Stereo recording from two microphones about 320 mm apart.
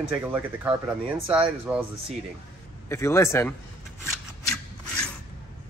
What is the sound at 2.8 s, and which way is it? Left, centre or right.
Speech, centre.